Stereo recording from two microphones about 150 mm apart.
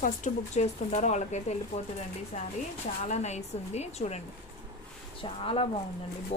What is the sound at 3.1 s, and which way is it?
Speech, 50° left (ahead or behind).